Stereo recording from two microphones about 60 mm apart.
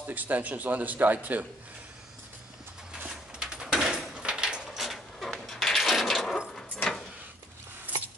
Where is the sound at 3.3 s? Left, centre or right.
Centre.